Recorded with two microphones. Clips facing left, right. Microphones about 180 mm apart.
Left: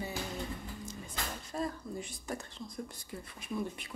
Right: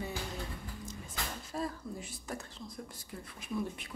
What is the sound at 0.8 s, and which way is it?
Speech, centre (ahead or behind).